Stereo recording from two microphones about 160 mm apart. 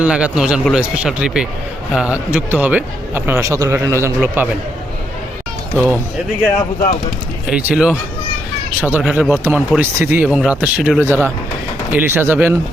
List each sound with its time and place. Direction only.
0.0 s a man's voice: 5° right (ahead or behind)
5.7 s a man's voice: 15° right (ahead or behind)
7.5 s a man's voice: 5° right (ahead or behind)
11.0 s a man's voice: 15° right (ahead or behind)